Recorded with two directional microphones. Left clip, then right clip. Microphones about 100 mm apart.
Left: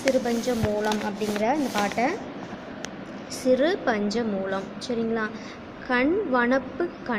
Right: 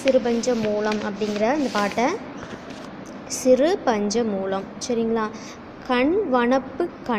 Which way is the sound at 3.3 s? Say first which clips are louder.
Right 4 dB; 45° right (ahead or behind).